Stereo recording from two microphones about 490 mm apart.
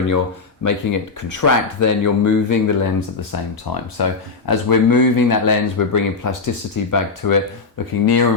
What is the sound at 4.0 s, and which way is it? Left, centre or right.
Speech, left.